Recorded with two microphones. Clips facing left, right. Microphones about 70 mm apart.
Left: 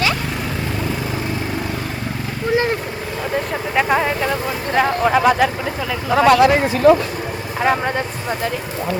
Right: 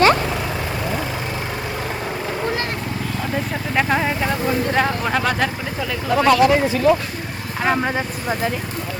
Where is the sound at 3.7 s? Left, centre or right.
Centre.